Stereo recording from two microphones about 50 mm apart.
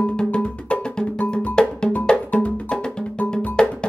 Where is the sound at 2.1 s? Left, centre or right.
Left.